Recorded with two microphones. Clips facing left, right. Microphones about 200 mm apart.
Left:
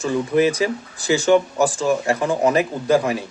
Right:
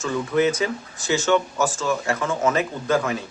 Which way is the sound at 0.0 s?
35° left (ahead or behind).